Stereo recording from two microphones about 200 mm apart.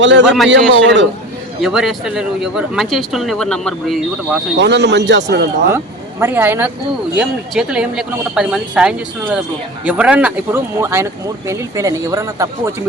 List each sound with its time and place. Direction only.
0.0 s a man's voice: 65° right (ahead or behind)
1.6 s speech: centre (ahead or behind)
4.5 s speech: 60° right (ahead or behind)
5.7 s speech: 10° right (ahead or behind)